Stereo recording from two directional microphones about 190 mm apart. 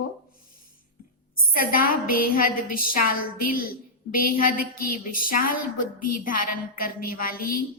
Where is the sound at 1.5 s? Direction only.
50° left (ahead or behind).